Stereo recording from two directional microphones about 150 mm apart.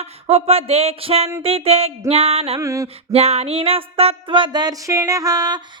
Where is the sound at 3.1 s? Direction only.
45° right (ahead or behind).